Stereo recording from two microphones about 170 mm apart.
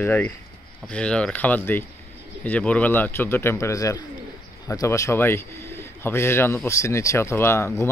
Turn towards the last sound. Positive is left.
turn(degrees=15)  # may be behind; listen again after turning